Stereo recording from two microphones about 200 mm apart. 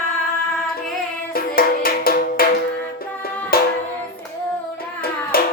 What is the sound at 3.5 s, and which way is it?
Music, 50° left (ahead or behind).